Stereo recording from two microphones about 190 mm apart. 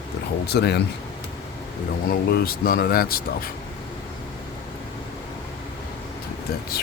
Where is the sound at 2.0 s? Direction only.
50° left (ahead or behind).